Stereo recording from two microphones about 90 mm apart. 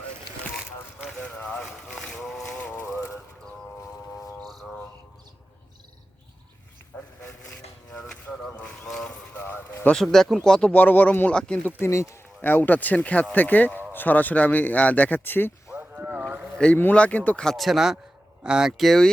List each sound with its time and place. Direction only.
1.2 s boat: 15° left (ahead or behind)
2.6 s a sound: 10° left (ahead or behind)
2.8 s a sound: 25° left (ahead or behind)
4.4 s music: 5° left (ahead or behind)
6.9 s dog: 15° left (ahead or behind)
8.1 s a sound: 10° left (ahead or behind)
8.9 s clip-clop: 5° left (ahead or behind)
9.3 s a sound: 25° left (ahead or behind)
9.9 s speech: 5° left (ahead or behind)
10.7 s speech: 20° left (ahead or behind)
11.9 s speech: 30° left (ahead or behind)
12.4 s speech: 20° left (ahead or behind)
15.7 s boat: 20° right (ahead or behind)
16.7 s speech: 20° left (ahead or behind); by 19.0 s centre (ahead or behind)